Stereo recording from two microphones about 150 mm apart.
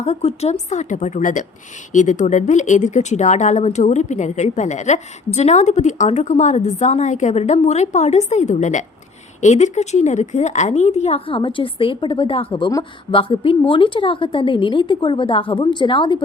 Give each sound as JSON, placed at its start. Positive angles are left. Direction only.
{"t": 0.0, "sound": "a woman's voice", "side_deg": 45}